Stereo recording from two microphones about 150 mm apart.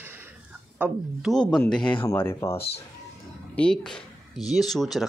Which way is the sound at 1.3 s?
5° left (ahead or behind).